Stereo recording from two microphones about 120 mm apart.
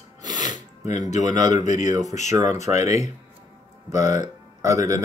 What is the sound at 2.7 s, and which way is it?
Speech, 70° left (ahead or behind).